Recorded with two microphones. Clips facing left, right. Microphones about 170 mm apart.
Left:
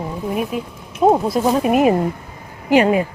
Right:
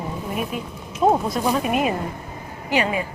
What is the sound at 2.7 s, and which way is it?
Speech, 50° left (ahead or behind).